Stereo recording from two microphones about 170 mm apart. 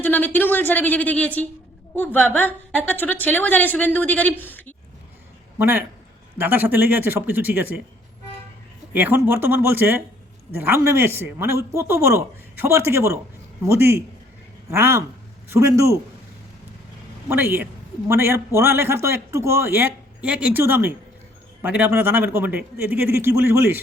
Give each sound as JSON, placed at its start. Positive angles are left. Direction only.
{"t": 0.0, "sound": "a woman's voice", "side_deg": 10}
{"t": 5.5, "sound": "a man's voice", "side_deg": -10}
{"t": 8.9, "sound": "a man's voice", "side_deg": -10}
{"t": 17.2, "sound": "a man's voice", "side_deg": -15}